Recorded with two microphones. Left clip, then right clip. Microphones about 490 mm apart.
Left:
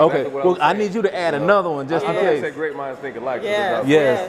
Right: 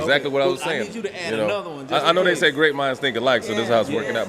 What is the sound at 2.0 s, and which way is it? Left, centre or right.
A man's voice, right.